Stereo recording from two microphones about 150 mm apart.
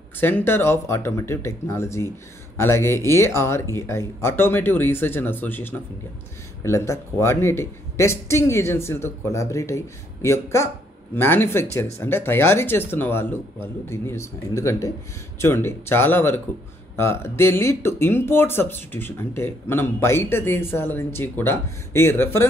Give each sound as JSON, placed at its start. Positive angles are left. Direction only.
{"t": 0.2, "sound": "a man's voice", "side_deg": 15}